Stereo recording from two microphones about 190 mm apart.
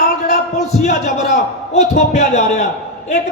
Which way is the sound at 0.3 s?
35° left (ahead or behind).